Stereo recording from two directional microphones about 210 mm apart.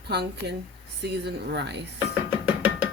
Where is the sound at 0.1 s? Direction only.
50° right (ahead or behind).